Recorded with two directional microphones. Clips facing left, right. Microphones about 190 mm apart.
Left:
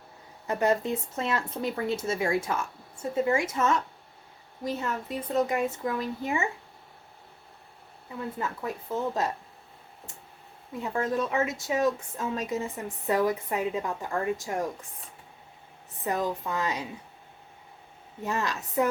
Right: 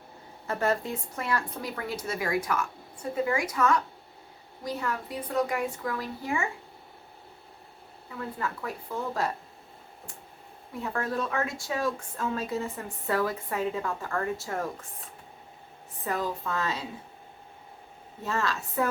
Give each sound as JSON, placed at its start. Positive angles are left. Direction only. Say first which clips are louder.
{"t": 0.4, "sound": "speech", "louder": "left 3 dB", "side_deg": 20}
{"t": 8.2, "sound": "speech", "louder": "left 1 dB", "side_deg": 20}
{"t": 10.8, "sound": "speech", "louder": "left 3 dB", "side_deg": 20}
{"t": 16.0, "sound": "speech", "louder": "left 2 dB", "side_deg": 20}
{"t": 18.2, "sound": "a woman's voice", "louder": "even", "side_deg": 15}